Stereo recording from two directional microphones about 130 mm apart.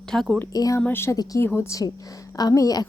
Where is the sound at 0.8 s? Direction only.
15° left (ahead or behind).